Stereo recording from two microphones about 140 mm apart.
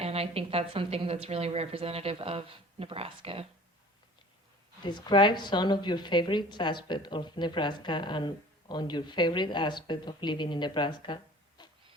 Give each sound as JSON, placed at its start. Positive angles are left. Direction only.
{"t": 0.0, "sound": "a woman's voice", "side_deg": -45}
{"t": 4.8, "sound": "a woman's voice", "side_deg": 35}